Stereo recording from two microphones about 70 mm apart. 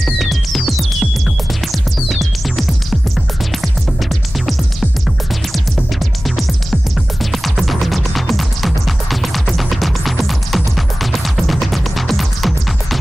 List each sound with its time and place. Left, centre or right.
0.0 s music: centre
5.5 s music: centre